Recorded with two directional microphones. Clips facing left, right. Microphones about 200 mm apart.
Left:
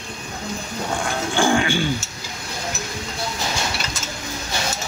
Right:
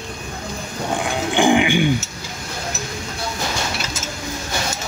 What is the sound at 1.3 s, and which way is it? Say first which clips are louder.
Music: right 4 dB; 15° right (ahead or behind).